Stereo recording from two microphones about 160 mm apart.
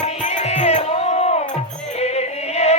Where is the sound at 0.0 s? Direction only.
45° left (ahead or behind).